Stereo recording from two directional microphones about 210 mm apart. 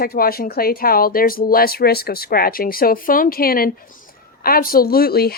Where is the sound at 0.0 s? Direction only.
45° left (ahead or behind).